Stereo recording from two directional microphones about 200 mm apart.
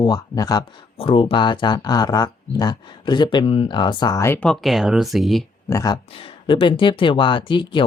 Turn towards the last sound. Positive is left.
turn(degrees=25)  # may be behind; listen again after turning